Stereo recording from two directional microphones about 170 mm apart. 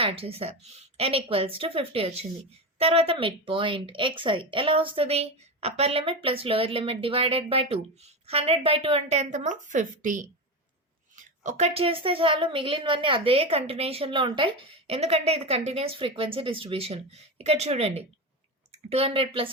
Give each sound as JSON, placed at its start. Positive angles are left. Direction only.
{"t": 0.0, "sound": "speech", "side_deg": -35}